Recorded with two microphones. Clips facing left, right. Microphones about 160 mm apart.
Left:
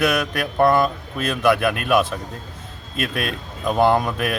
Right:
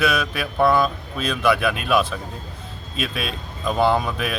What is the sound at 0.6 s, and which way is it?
A man's voice, 10° left (ahead or behind).